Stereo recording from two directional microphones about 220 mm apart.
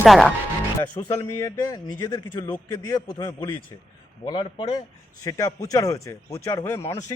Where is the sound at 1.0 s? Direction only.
20° left (ahead or behind).